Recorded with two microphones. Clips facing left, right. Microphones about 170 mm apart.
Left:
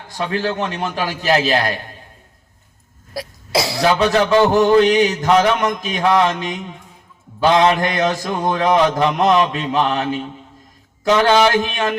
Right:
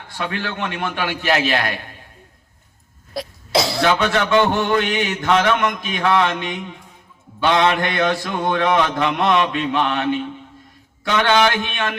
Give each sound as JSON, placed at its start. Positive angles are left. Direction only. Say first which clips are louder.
{"t": 0.1, "sound": "a man's voice", "louder": "left 5 dB", "side_deg": 35}
{"t": 3.2, "sound": "cough", "louder": "even", "side_deg": 0}
{"t": 3.8, "sound": "a man's voice", "louder": "left 5 dB", "side_deg": 35}